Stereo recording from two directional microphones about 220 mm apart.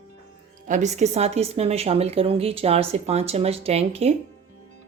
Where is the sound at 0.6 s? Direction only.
35° right (ahead or behind).